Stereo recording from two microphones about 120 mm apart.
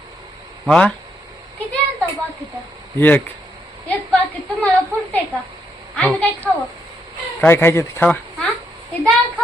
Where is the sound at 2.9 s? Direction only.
15° left (ahead or behind).